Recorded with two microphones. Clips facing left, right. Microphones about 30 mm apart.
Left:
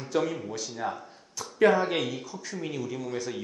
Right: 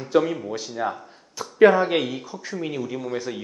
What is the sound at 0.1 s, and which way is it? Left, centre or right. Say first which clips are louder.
Speech: right 7 dB; centre.